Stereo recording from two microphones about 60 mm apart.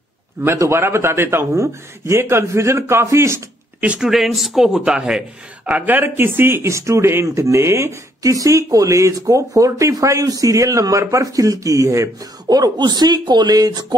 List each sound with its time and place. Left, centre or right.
0.6 s a man's voice: right
4.0 s speech: centre
5.7 s a man's voice: right
8.2 s speech: right